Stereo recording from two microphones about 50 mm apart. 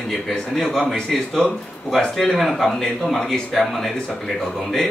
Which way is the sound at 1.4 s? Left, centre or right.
Left.